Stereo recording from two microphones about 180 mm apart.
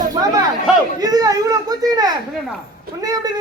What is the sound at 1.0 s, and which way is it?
Speech, 20° right (ahead or behind).